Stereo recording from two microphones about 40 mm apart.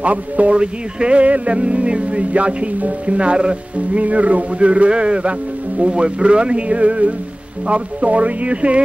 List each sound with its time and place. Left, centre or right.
0.0 s music: right
0.6 s music: right
5.8 s speech: right
7.6 s music: right